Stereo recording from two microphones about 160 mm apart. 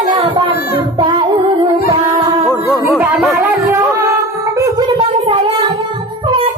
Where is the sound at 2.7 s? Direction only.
10° right (ahead or behind).